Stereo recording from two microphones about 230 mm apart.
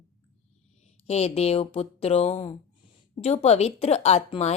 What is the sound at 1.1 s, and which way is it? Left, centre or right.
Speech, left.